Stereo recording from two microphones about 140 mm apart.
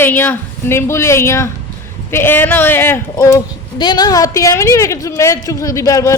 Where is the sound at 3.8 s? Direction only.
30° left (ahead or behind).